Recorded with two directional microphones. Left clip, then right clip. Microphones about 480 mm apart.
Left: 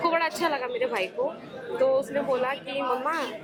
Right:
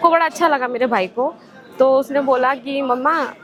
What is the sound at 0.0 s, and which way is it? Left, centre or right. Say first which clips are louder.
A woman's voice: right 10 dB; right.